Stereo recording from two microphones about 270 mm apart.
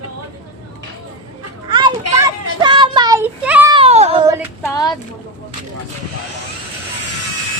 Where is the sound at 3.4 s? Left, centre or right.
Centre.